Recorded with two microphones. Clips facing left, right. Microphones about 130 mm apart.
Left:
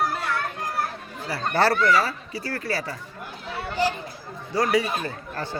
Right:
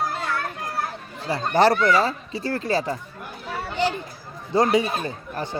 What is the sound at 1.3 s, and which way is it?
Speech, 20° right (ahead or behind).